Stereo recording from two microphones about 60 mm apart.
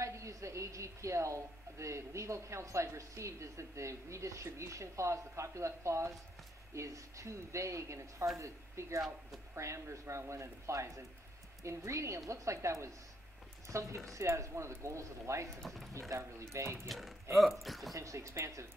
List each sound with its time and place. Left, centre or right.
0.0 s a woman's voice: right
15.6 s speech: centre
16.1 s a woman's voice: right
17.4 s speech: centre
17.9 s a woman's voice: right